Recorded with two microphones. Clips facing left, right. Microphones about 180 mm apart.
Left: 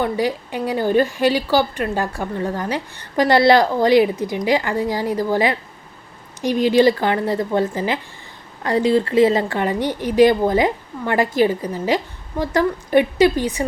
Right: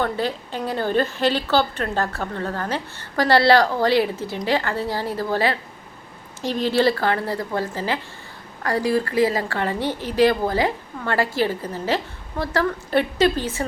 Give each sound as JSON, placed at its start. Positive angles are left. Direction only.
{"t": 0.0, "sound": "a woman's voice", "side_deg": 15}